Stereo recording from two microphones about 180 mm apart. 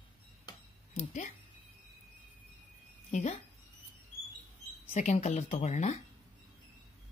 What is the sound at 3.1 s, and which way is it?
Speech, 40° left (ahead or behind).